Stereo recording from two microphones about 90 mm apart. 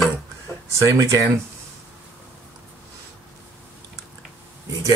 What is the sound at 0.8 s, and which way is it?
Speech, 35° right (ahead or behind).